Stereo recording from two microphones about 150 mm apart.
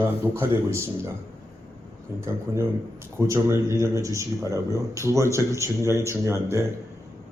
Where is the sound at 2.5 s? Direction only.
15° right (ahead or behind).